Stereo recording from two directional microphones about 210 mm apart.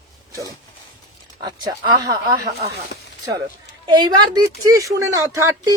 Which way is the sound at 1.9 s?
20° right (ahead or behind).